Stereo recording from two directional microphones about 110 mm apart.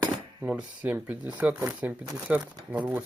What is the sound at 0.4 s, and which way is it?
Speech, 10° right (ahead or behind).